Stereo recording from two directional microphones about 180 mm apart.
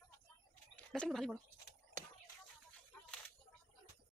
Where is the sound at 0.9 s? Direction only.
Centre (ahead or behind).